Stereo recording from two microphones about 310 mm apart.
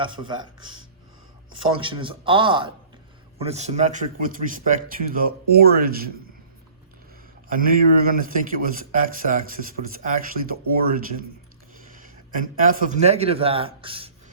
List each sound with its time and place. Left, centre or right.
0.0 s a man's voice: centre
1.7 s a man's voice: centre
7.4 s speech: right
12.0 s a sound: right
12.9 s a man's voice: right